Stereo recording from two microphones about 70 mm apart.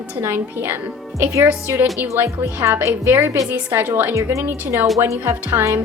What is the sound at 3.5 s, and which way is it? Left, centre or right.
Speech, right.